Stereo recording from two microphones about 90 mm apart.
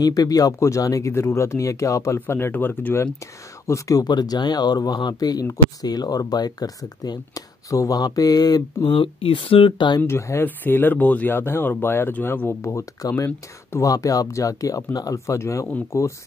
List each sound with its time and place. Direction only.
0.0 s speech: 40° left (ahead or behind)
2.1 s speech: 25° left (ahead or behind)
3.6 s speech: 35° left (ahead or behind)
8.9 s speech: 75° left (ahead or behind)
10.0 s speech: 30° left (ahead or behind)